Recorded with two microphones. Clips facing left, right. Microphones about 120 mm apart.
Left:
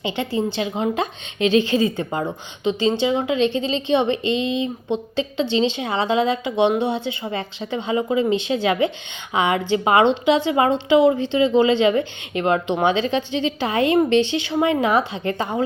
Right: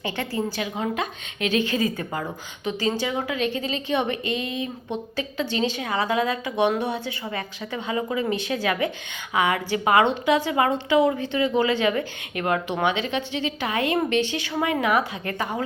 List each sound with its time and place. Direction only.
0.0 s a woman's voice: 20° left (ahead or behind)